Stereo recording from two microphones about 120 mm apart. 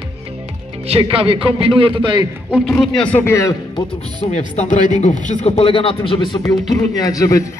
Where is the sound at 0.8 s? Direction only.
55° right (ahead or behind).